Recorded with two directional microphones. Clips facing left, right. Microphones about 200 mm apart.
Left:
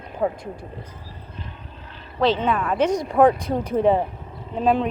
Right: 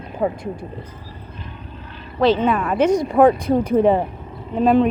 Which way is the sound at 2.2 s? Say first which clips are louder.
Right 4 dB; 5° right (ahead or behind).